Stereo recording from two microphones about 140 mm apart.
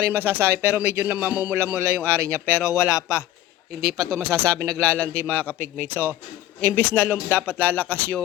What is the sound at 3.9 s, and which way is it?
Speech, 25° right (ahead or behind).